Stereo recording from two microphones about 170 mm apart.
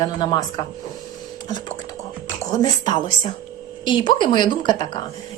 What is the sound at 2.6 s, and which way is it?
Speech, 25° left (ahead or behind).